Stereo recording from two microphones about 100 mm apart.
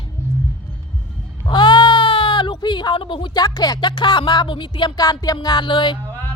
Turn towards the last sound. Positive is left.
turn(degrees=55)  # may be behind; listen again after turning